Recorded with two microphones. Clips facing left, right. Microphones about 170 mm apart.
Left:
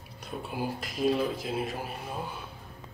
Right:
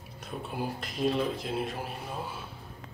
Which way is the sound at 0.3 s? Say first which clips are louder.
Left 1 dB; centre (ahead or behind).